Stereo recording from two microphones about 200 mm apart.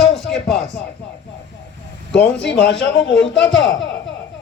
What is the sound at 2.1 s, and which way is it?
A man's voice, 60° left (ahead or behind).